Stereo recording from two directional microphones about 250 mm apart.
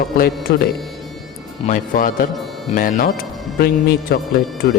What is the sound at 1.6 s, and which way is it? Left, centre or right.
Speech, left.